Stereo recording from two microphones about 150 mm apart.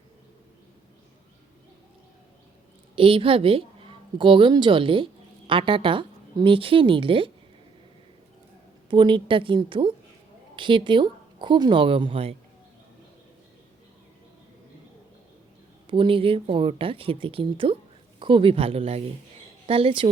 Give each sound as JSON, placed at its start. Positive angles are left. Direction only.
{"t": 2.9, "sound": "a woman's voice", "side_deg": -35}
{"t": 8.9, "sound": "speech", "side_deg": -30}
{"t": 15.9, "sound": "speech", "side_deg": -35}